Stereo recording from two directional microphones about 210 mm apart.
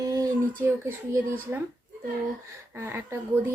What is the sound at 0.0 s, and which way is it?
Speech, 15° right (ahead or behind).